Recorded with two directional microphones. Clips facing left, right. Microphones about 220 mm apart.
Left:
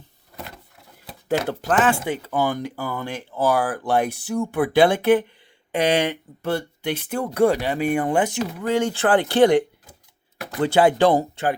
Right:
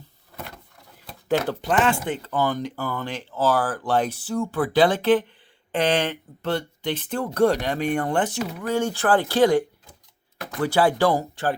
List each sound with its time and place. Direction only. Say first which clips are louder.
1.0 s speech: even; 5° left (ahead or behind); by 11.5 s 20° left (ahead or behind)